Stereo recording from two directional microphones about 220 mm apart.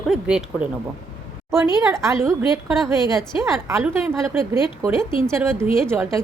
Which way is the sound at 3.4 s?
15° right (ahead or behind).